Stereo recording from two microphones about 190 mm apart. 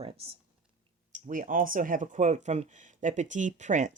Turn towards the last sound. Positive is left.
turn(degrees=-40)  # may be behind; listen again after turning